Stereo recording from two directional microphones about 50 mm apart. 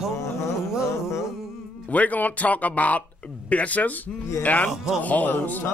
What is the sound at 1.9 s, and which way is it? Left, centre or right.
Speech, left.